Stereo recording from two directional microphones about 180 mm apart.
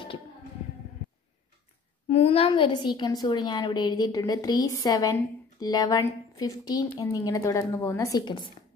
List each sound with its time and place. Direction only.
2.0 s a woman's voice: 30° left (ahead or behind)